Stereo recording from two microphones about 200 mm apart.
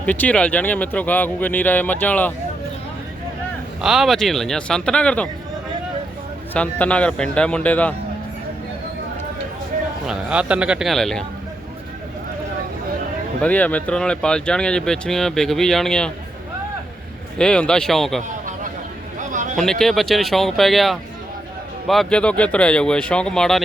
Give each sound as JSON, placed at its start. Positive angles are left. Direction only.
{"t": 0.0, "sound": "speech", "side_deg": 5}
{"t": 3.8, "sound": "speech", "side_deg": 0}
{"t": 6.5, "sound": "speech", "side_deg": 5}
{"t": 10.1, "sound": "speech", "side_deg": -5}
{"t": 13.4, "sound": "speech", "side_deg": 5}
{"t": 17.3, "sound": "speech", "side_deg": 5}
{"t": 18.3, "sound": "a sound", "side_deg": -40}
{"t": 19.8, "sound": "speech", "side_deg": 0}